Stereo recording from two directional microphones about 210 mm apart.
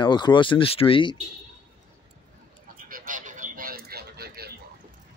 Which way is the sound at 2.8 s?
40° right (ahead or behind).